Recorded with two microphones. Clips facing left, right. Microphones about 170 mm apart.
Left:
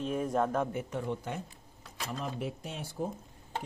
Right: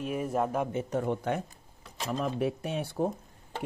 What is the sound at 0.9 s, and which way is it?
Speech, 50° right (ahead or behind).